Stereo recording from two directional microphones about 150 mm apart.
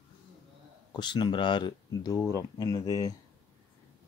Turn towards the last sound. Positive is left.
turn(degrees=25)  # may be behind; listen again after turning